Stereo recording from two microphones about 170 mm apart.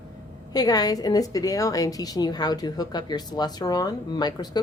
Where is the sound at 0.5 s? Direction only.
20° left (ahead or behind).